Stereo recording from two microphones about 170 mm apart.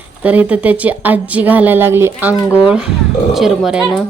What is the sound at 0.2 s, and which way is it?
A woman's voice, 10° right (ahead or behind).